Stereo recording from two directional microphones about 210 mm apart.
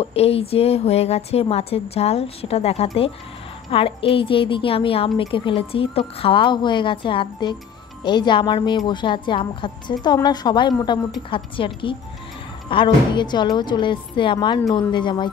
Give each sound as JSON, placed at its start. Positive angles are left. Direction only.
{"t": 0.0, "sound": "speech", "side_deg": 30}